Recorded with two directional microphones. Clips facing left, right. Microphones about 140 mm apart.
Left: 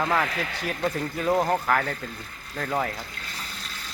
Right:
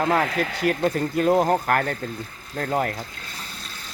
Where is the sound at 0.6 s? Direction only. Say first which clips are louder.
Right 12 dB; 70° right (ahead or behind).